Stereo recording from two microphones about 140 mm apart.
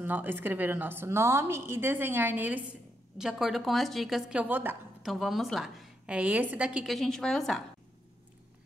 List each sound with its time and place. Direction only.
0.0 s a woman's voice: 15° right (ahead or behind)
5.0 s a woman's voice: centre (ahead or behind)